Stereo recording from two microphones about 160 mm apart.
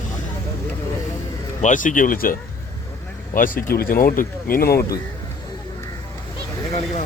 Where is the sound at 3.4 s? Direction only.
60° left (ahead or behind).